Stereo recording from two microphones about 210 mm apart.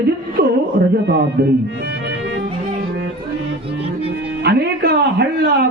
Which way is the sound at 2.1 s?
60° right (ahead or behind).